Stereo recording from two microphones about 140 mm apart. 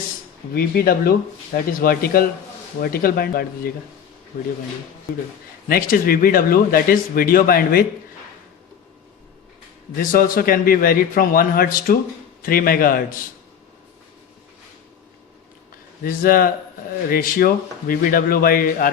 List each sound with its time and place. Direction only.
0.5 s speech: 90° left
5.6 s speech: 90° left
10.0 s speech: 85° left
16.0 s speech: 90° left